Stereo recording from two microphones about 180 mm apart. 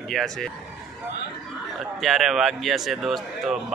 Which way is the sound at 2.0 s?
Centre (ahead or behind).